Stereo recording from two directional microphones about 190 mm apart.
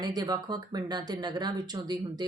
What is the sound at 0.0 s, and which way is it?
Speech, 20° right (ahead or behind).